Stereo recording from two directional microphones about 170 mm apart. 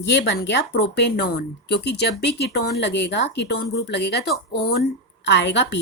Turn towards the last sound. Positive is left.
turn(degrees=90)